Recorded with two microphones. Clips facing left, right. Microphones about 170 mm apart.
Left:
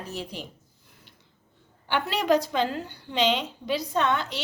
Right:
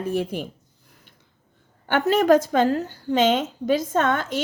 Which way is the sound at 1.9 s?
45° right (ahead or behind).